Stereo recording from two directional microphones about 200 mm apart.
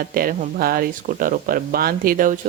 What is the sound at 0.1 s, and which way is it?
Speech, 45° right (ahead or behind).